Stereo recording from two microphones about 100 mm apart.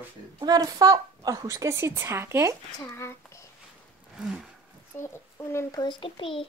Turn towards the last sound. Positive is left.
turn(degrees=60)  # may be behind; listen again after turning